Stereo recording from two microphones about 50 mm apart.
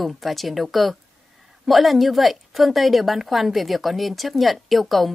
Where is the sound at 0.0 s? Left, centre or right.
Centre.